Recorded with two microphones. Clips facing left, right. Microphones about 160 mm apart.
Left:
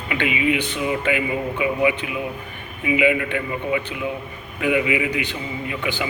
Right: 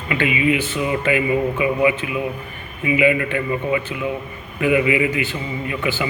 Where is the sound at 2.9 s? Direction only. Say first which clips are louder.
Right 2 dB; 15° left (ahead or behind).